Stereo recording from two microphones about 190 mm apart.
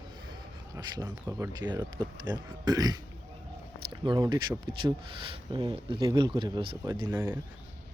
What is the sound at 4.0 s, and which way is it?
Speech, 25° right (ahead or behind).